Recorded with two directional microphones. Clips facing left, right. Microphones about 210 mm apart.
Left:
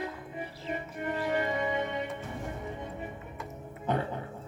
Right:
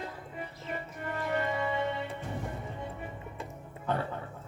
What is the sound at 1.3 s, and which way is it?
Music, 20° left (ahead or behind).